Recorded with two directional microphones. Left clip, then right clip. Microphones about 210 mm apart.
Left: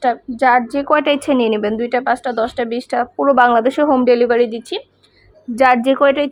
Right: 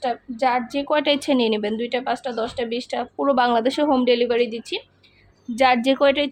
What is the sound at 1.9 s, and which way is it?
Speech, 20° left (ahead or behind).